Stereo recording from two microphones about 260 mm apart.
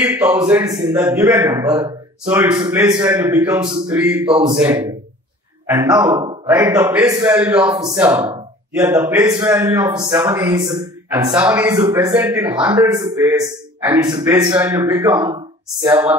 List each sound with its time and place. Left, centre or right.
0.0 s a man's voice: centre
2.5 s a man's voice: centre